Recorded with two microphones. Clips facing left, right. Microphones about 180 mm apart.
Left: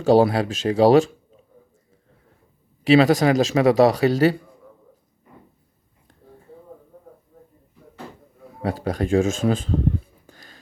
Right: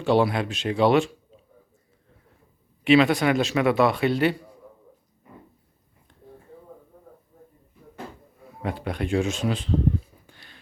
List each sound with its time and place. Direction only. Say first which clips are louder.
0.0 s speech: left 5 dB; 40° left (ahead or behind)
2.8 s speech: left 3 dB; 35° left (ahead or behind)
8.6 s speech: left 5 dB; 40° left (ahead or behind)
10.2 s a sound: left 4 dB; 40° left (ahead or behind)